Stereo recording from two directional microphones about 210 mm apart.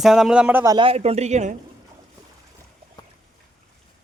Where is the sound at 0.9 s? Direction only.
30° right (ahead or behind).